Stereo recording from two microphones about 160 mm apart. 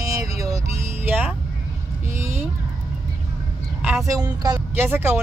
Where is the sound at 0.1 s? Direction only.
20° right (ahead or behind).